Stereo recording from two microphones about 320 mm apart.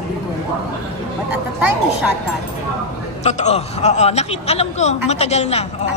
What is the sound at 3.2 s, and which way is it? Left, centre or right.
A man's voice, left.